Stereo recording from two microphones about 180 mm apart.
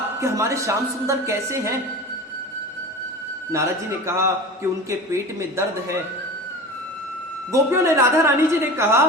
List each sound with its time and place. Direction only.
0.2 s a woman's voice: 15° right (ahead or behind)
3.5 s a woman's voice: 15° right (ahead or behind)
7.5 s a woman's voice: 15° right (ahead or behind)